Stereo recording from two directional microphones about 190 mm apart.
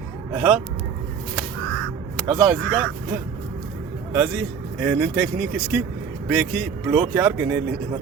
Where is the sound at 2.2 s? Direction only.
5° right (ahead or behind).